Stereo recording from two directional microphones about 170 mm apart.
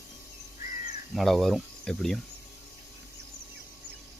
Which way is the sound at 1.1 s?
Centre (ahead or behind).